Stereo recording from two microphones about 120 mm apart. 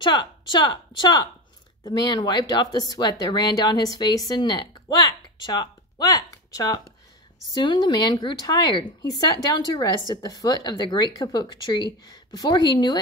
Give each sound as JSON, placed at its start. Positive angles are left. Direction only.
{"t": 0.0, "sound": "speech", "side_deg": 40}